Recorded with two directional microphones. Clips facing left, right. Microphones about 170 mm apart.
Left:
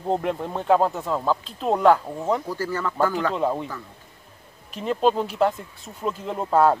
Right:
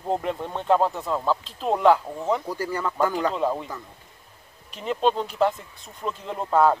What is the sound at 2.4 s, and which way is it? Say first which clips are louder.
Speech: left 1 dB; 15° right (ahead or behind).